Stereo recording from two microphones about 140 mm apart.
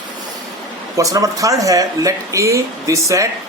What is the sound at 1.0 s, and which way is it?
Speech, 25° right (ahead or behind).